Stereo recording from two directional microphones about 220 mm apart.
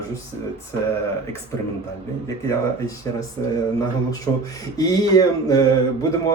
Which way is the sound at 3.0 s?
15° left (ahead or behind).